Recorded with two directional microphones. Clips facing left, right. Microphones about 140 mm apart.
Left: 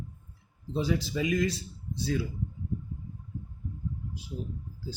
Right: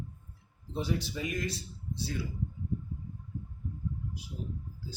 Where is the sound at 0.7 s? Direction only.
90° left.